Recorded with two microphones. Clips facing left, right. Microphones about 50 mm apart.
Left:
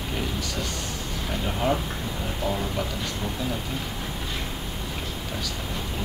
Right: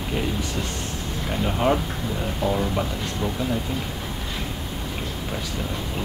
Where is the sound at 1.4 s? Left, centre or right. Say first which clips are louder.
Right 4 dB; centre.